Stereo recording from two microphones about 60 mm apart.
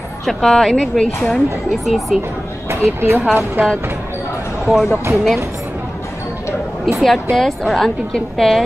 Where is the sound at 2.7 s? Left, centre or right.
Right.